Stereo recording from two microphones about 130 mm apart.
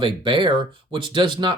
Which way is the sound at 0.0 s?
40° right (ahead or behind).